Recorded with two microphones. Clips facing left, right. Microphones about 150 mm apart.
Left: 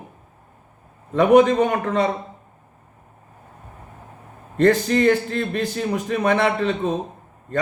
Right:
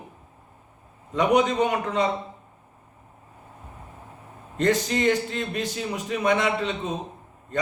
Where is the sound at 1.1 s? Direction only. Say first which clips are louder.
Left 7 dB; 50° left (ahead or behind).